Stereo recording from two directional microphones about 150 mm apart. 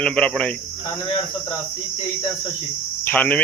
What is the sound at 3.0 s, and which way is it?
Speech, 10° left (ahead or behind).